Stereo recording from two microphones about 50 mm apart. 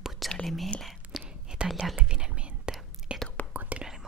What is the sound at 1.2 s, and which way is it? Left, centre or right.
Whispering, centre.